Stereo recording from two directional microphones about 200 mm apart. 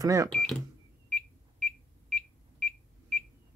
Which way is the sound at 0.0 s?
15° right (ahead or behind).